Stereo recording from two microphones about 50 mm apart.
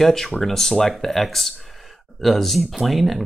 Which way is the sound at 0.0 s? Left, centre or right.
Centre.